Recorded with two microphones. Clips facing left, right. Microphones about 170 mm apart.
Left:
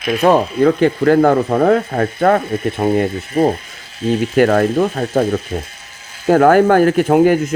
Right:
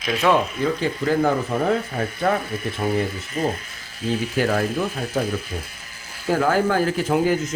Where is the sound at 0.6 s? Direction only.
60° left (ahead or behind).